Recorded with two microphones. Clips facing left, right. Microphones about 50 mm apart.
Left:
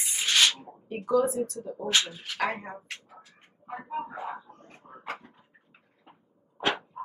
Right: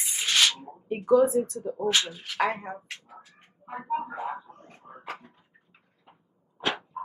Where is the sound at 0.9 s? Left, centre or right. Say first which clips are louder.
Right 5 dB; right.